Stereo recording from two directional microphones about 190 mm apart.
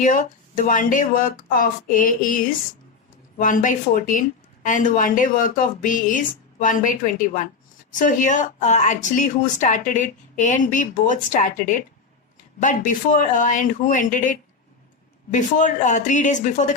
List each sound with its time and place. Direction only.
0.0 s a woman's voice: 40° left (ahead or behind)